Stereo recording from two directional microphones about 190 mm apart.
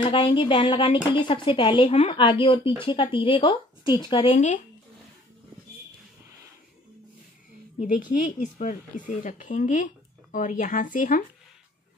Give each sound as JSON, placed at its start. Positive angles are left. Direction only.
{"t": 0.0, "sound": "a woman's voice", "side_deg": 25}
{"t": 7.8, "sound": "speech", "side_deg": 45}